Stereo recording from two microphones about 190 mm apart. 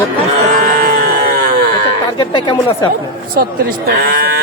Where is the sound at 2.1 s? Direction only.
25° left (ahead or behind).